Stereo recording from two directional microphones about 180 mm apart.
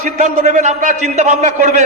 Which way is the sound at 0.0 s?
40° right (ahead or behind).